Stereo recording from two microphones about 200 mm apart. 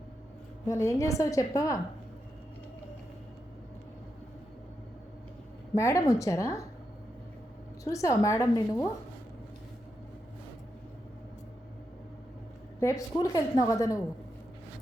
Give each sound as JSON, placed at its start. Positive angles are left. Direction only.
{"t": 0.7, "sound": "a woman's voice", "side_deg": 15}
{"t": 5.7, "sound": "a woman's voice", "side_deg": 15}
{"t": 7.9, "sound": "a woman's voice", "side_deg": 15}
{"t": 12.8, "sound": "a woman's voice", "side_deg": 15}